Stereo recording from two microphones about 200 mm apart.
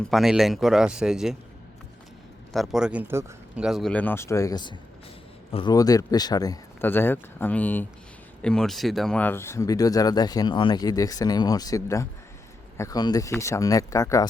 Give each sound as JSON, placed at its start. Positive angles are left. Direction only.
{"t": 0.0, "sound": "speech", "side_deg": 0}
{"t": 2.5, "sound": "speech", "side_deg": 0}